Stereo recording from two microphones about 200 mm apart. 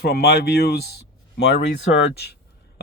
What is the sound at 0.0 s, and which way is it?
Speech, 55° left (ahead or behind).